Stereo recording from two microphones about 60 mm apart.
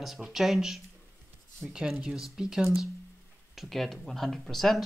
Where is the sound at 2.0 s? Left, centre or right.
Centre.